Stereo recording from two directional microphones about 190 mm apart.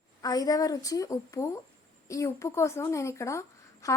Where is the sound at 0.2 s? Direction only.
20° left (ahead or behind).